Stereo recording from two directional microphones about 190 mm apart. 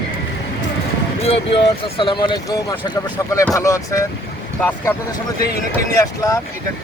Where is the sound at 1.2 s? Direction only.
30° left (ahead or behind).